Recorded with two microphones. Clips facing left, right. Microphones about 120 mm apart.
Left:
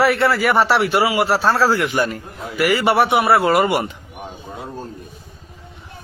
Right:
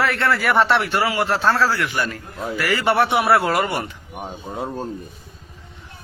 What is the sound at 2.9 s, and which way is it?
Speech, centre (ahead or behind).